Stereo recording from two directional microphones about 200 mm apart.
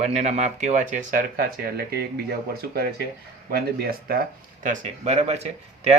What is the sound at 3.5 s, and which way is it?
Speech, 50° right (ahead or behind).